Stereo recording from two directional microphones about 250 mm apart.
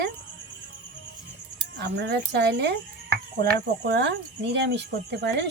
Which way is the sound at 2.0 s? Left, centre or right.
Right.